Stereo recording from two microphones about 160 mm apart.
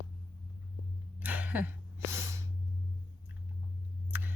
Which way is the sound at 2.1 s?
15° right (ahead or behind).